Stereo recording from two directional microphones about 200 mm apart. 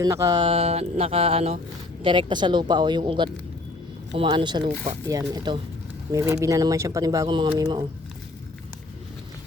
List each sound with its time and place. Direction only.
0.0 s speech: 15° right (ahead or behind)